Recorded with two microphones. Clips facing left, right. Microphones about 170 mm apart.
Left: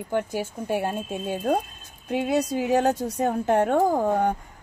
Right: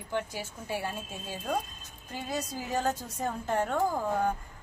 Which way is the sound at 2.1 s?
70° left (ahead or behind).